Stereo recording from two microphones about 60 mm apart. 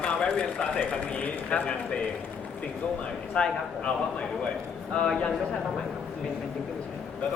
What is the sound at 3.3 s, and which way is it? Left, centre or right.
A man's voice, centre.